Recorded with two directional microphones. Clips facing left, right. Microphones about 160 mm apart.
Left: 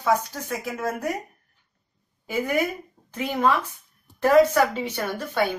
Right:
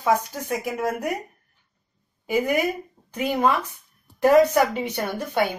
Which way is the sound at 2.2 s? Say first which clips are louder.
Right 3 dB; 15° right (ahead or behind).